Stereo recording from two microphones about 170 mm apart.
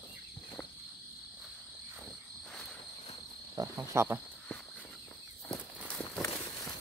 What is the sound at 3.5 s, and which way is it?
Speech, 20° right (ahead or behind).